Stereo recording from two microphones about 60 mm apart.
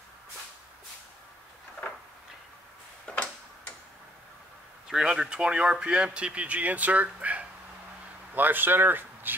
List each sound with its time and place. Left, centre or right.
3.1 s tick-tock: centre
4.8 s speech: centre; by 9.3 s right